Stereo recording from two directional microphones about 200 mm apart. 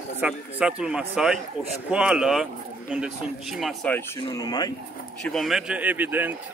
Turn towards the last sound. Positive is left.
turn(degrees=-10)  # may be behind; listen again after turning